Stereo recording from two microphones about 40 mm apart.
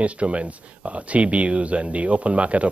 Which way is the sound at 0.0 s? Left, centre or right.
Right.